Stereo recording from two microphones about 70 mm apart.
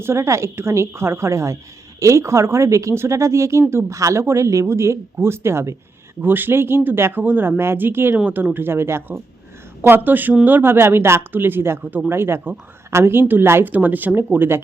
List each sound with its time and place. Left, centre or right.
0.0 s speech: right